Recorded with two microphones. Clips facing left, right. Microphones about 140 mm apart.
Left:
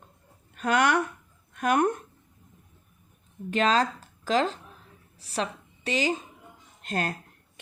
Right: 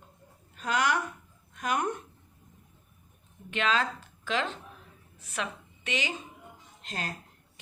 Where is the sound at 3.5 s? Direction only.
40° left (ahead or behind).